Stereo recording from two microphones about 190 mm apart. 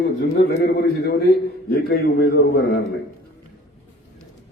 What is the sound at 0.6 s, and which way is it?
A man's voice, 55° left (ahead or behind).